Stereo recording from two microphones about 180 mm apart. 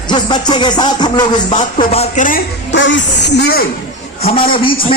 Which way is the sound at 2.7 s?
90° left.